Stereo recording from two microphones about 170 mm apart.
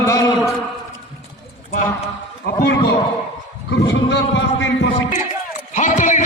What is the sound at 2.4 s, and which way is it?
A man's voice, 90° left.